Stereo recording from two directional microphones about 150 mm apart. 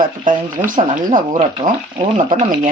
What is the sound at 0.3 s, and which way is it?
Speech, 60° right (ahead or behind).